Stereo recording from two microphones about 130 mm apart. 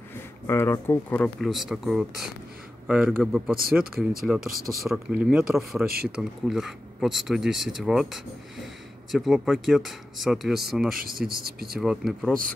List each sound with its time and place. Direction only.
0.1 s speech: 20° left (ahead or behind)
1.4 s speech: centre (ahead or behind)